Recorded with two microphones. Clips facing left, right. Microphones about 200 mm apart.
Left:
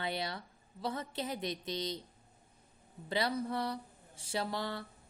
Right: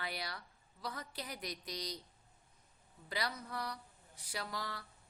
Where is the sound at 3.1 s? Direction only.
25° left (ahead or behind).